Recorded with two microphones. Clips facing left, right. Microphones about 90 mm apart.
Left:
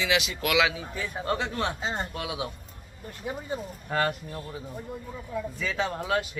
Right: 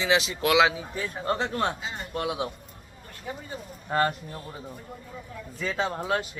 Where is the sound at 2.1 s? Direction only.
45° right (ahead or behind).